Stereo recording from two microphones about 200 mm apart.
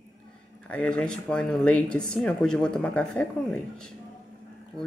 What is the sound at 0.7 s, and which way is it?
Speech, 5° left (ahead or behind).